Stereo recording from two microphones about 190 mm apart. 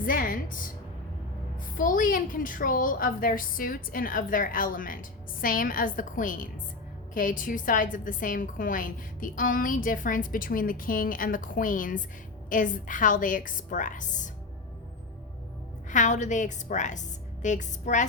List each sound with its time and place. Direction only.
0.0 s a woman's voice: 45° left (ahead or behind)
1.7 s a woman's voice: 45° left (ahead or behind)
15.9 s a woman's voice: 40° left (ahead or behind)